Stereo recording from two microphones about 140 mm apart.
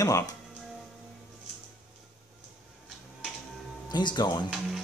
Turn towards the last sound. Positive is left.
turn(degrees=0)  # may be behind; listen again after turning